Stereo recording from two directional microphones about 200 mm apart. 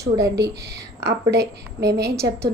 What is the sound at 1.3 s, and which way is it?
Speech, 55° right (ahead or behind).